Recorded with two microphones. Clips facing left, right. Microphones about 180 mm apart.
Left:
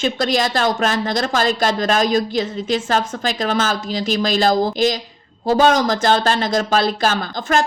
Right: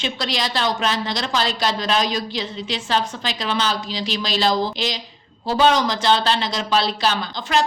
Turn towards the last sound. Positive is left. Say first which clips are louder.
# left 3 dB
turn(degrees=50)  # may be behind; listen again after turning